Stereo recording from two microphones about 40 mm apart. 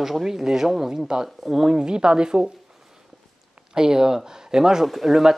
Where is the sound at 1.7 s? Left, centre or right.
Right.